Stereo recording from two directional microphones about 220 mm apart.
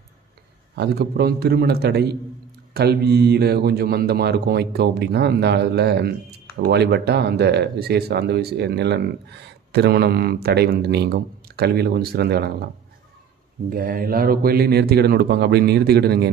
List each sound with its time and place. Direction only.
0.7 s speech: 45° right (ahead or behind)
13.7 s speech: 40° right (ahead or behind)